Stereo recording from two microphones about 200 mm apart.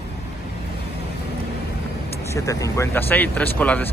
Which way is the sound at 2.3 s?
15° left (ahead or behind).